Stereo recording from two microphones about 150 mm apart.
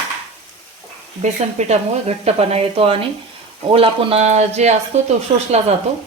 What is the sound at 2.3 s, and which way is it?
Speech, 40° right (ahead or behind).